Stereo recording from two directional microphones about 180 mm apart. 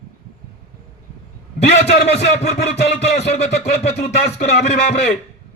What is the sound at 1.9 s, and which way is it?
A man's voice, 35° left (ahead or behind).